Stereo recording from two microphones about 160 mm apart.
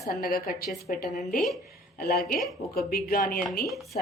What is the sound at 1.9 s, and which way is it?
Speech, 75° left (ahead or behind).